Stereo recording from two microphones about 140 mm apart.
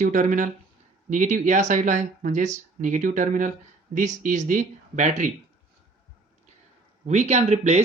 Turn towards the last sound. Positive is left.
turn(degrees=-55)  # may be behind; listen again after turning